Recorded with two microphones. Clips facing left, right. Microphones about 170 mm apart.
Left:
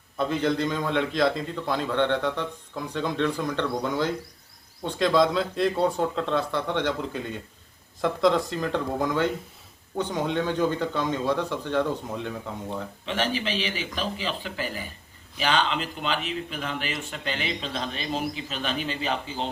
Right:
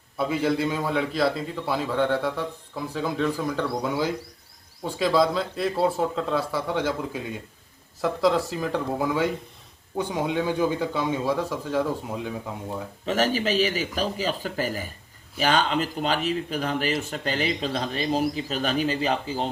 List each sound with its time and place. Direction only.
0.2 s a man's voice: 5° right (ahead or behind)
13.1 s speech: 40° right (ahead or behind)